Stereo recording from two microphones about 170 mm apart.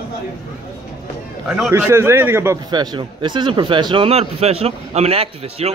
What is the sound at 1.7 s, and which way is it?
A man's voice, 15° right (ahead or behind).